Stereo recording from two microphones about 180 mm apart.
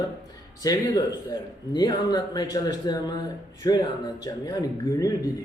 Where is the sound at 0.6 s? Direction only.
20° left (ahead or behind).